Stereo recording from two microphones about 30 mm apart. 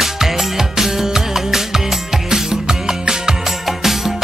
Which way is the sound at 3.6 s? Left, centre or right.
Centre.